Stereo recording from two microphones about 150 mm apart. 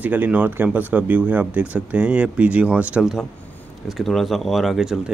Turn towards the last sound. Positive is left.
turn(degrees=-5)  # may be behind; listen again after turning